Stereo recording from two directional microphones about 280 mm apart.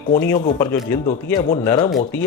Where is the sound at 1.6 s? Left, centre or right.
Centre.